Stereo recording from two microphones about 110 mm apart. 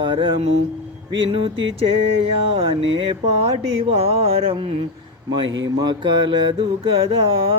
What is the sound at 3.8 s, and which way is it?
Mantra, 60° right (ahead or behind).